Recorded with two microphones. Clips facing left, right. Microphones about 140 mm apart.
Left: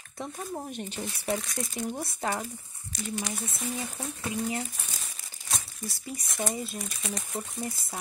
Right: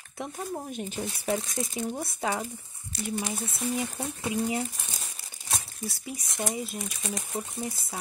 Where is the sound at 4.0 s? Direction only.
20° right (ahead or behind).